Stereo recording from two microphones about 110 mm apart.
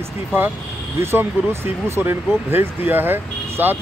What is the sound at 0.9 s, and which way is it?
Speech, 20° right (ahead or behind).